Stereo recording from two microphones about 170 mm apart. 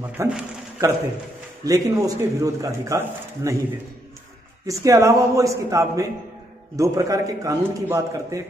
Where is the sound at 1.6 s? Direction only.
20° right (ahead or behind).